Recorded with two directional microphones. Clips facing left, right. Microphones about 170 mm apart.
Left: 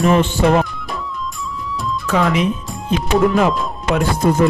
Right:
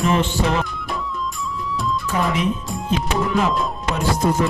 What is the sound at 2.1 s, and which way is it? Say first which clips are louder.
Speech: left 7 dB; 80° left.